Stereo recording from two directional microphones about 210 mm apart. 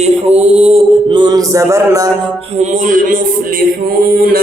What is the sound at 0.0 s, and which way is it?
Mantra, 30° right (ahead or behind).